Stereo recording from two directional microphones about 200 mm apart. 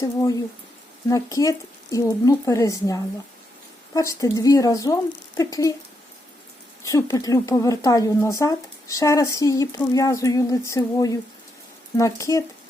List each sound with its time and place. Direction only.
0.0 s speech: 15° left (ahead or behind)
6.8 s speech: 15° left (ahead or behind)